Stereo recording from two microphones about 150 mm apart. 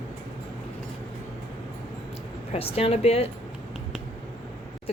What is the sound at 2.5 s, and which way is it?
Speech, 40° left (ahead or behind).